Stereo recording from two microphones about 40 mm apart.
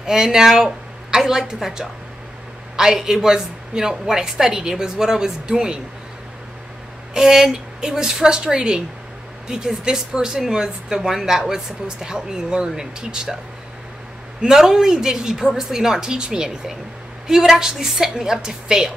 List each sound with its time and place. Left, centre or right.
0.0 s a woman's voice: centre
7.2 s a woman's voice: centre
14.4 s a woman's voice: centre